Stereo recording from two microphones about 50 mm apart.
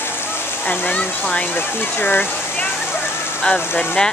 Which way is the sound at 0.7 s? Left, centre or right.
Left.